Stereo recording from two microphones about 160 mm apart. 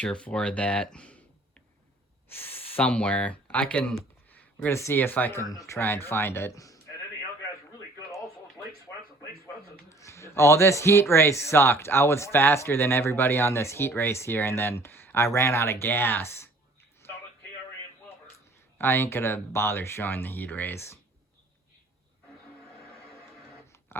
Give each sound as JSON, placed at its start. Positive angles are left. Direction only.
{"t": 0.0, "sound": "speech", "side_deg": 5}
{"t": 8.1, "sound": "music", "side_deg": 20}
{"t": 9.9, "sound": "a sound", "side_deg": 15}
{"t": 11.1, "sound": "speech", "side_deg": 15}
{"t": 18.8, "sound": "speech", "side_deg": 15}
{"t": 23.0, "sound": "printer", "side_deg": 0}
{"t": 23.9, "sound": "a sound", "side_deg": 15}